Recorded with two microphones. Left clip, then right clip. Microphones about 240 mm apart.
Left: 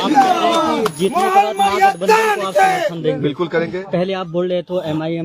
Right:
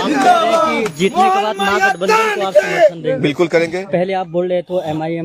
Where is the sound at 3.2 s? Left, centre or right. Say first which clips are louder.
Right 4 dB; right.